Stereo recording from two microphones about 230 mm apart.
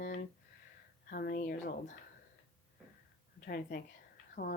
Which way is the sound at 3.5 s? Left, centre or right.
Left.